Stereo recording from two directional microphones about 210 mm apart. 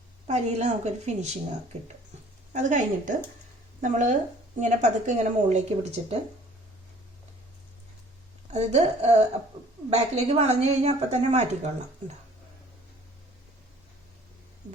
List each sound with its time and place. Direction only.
0.3 s a woman's voice: 35° right (ahead or behind)
2.5 s a woman's voice: 35° right (ahead or behind)
8.5 s a woman's voice: 30° right (ahead or behind)